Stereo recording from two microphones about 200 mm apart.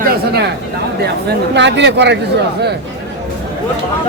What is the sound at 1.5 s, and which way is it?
Speech, 60° right (ahead or behind).